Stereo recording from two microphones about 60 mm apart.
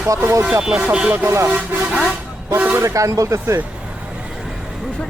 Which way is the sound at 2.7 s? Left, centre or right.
Right.